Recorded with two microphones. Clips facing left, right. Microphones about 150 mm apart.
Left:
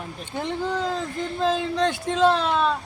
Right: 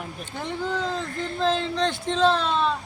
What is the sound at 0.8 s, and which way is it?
Speech, 10° left (ahead or behind).